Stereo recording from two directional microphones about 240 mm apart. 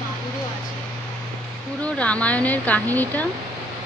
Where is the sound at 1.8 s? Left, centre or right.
Centre.